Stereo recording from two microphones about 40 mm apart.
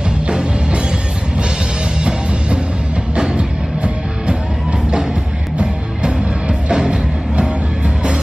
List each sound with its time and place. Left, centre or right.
0.3 s music: right
3.2 s music: right
6.7 s music: centre